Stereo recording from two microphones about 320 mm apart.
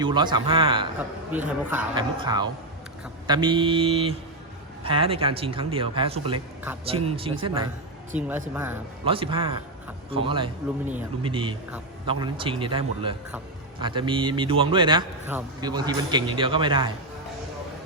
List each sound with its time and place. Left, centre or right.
0.0 s a man's voice: centre
1.3 s a man's voice: centre
8.1 s a man's voice: centre